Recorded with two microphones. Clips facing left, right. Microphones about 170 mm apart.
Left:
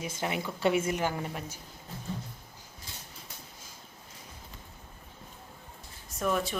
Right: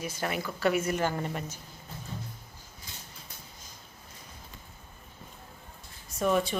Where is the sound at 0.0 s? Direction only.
20° left (ahead or behind).